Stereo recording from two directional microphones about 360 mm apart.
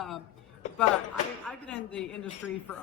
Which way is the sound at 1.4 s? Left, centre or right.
Centre.